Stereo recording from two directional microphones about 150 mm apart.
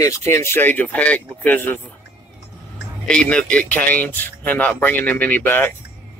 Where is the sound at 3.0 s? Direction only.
5° left (ahead or behind).